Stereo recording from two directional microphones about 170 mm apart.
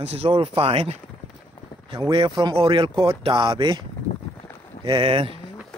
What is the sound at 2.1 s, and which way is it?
Speech, 30° right (ahead or behind).